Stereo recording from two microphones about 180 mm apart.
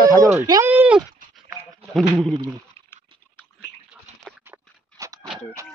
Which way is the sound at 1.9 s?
Centre (ahead or behind).